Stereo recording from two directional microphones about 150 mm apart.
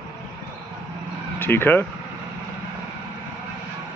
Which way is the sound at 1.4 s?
15° left (ahead or behind).